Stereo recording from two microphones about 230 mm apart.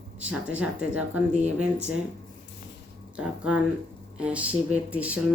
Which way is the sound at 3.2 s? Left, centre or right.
Centre.